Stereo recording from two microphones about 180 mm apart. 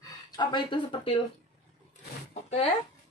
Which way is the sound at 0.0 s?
25° left (ahead or behind).